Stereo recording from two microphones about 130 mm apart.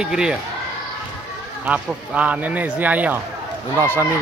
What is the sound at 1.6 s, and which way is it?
Speech, 10° right (ahead or behind).